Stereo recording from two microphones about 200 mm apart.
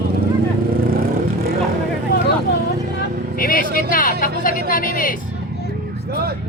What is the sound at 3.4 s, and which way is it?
Vehicle, 45° left (ahead or behind).